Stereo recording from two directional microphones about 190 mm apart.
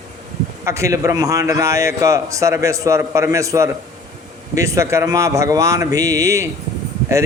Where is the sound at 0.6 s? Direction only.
15° right (ahead or behind).